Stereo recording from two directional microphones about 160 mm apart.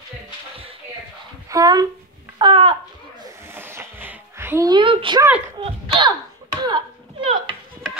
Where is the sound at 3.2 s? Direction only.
15° right (ahead or behind).